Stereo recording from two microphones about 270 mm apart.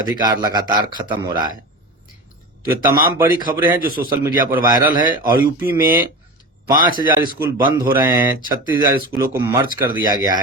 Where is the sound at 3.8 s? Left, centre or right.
Right.